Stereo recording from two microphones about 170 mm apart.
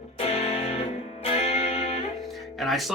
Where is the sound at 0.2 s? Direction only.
35° left (ahead or behind).